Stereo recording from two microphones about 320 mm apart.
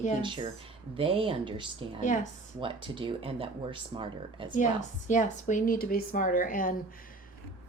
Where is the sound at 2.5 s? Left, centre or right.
Centre.